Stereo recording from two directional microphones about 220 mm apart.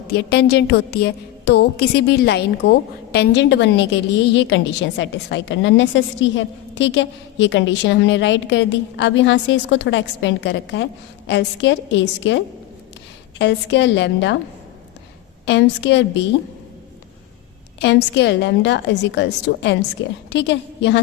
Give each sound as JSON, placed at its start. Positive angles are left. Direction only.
{"t": 0.1, "sound": "a woman's voice", "side_deg": 50}
{"t": 13.4, "sound": "a woman's voice", "side_deg": 50}
{"t": 15.4, "sound": "a woman's voice", "side_deg": 55}
{"t": 17.7, "sound": "a woman's voice", "side_deg": 55}